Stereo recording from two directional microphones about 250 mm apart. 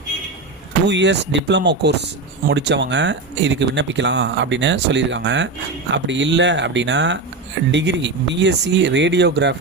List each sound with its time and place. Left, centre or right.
0.9 s speech: right